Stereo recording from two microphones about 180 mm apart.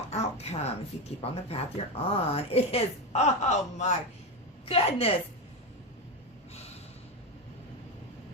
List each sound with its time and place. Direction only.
0.1 s speech: 35° left (ahead or behind)